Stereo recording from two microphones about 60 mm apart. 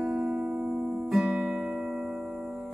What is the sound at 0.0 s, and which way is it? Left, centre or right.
Music, centre.